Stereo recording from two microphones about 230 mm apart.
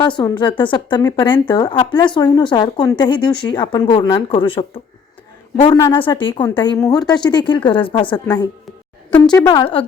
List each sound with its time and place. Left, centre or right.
0.0 s a woman's voice: centre
9.0 s a sound: centre
9.5 s a woman's voice: left